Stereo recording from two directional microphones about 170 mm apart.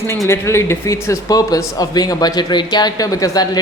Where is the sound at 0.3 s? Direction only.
15° left (ahead or behind).